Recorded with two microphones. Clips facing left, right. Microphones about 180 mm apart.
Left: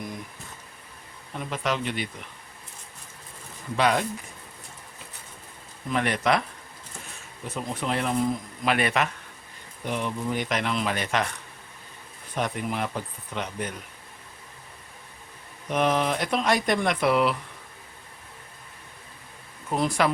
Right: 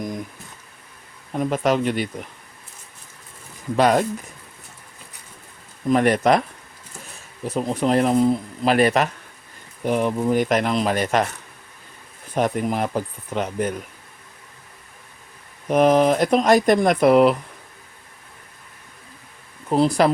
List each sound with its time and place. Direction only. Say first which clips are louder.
1.4 s speech: right 9 dB; 45° right (ahead or behind)
3.8 s speech: right 6 dB; 45° right (ahead or behind)
5.9 s speech: right 7 dB; 45° right (ahead or behind)
7.4 s speech: right 9 dB; 35° right (ahead or behind)
12.3 s speech: right 7 dB; 45° right (ahead or behind)
15.7 s speech: right 8 dB; 40° right (ahead or behind)
19.7 s speech: right 7 dB; 35° right (ahead or behind)